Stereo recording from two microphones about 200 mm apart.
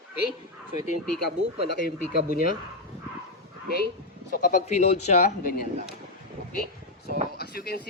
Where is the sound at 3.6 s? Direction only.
50° left (ahead or behind); by 5.5 s 35° left (ahead or behind).